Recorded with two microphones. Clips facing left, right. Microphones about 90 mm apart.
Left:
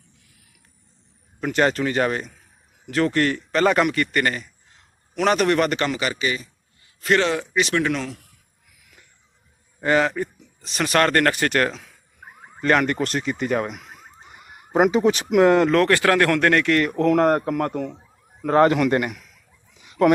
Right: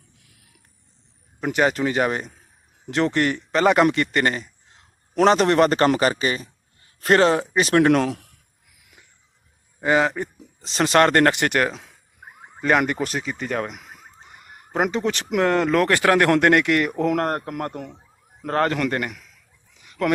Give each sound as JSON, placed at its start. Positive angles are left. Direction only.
{"t": 1.4, "sound": "a man's voice", "side_deg": -10}
{"t": 9.8, "sound": "speech", "side_deg": -15}
{"t": 10.6, "sound": "speech", "side_deg": -30}
{"t": 12.5, "sound": "speech", "side_deg": -10}
{"t": 15.8, "sound": "speech", "side_deg": -20}
{"t": 18.4, "sound": "speech", "side_deg": 10}
{"t": 19.8, "sound": "a sound", "side_deg": 20}